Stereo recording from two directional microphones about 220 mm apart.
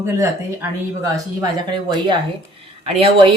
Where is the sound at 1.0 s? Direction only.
15° right (ahead or behind).